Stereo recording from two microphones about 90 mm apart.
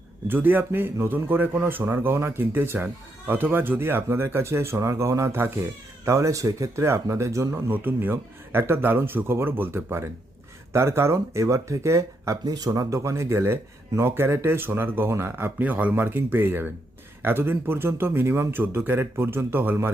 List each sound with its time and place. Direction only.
0.3 s speech: 20° right (ahead or behind)
7.7 s speech: 20° right (ahead or behind)